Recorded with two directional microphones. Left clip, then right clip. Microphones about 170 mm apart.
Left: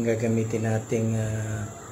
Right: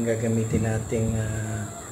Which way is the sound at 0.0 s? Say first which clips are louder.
Even; 30° left (ahead or behind).